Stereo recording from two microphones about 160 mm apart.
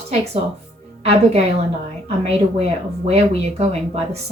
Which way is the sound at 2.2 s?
40° right (ahead or behind).